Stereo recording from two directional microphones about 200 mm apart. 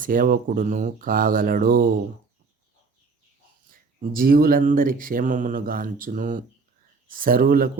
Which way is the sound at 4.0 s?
45° right (ahead or behind).